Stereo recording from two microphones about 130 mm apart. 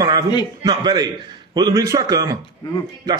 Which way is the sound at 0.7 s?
30° right (ahead or behind).